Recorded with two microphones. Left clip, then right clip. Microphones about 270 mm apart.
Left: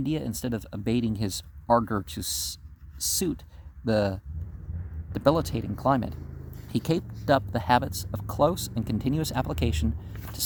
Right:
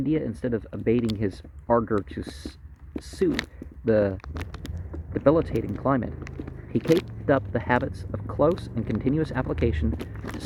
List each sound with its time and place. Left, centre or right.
0.0 s speech: left
7.3 s speech: left